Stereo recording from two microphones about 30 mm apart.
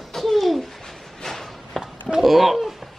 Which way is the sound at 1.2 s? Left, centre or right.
Centre.